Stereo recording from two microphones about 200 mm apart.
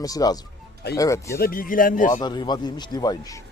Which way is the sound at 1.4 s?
45° left (ahead or behind).